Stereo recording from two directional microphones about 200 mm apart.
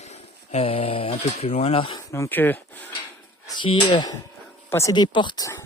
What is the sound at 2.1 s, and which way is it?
Speech, 15° left (ahead or behind).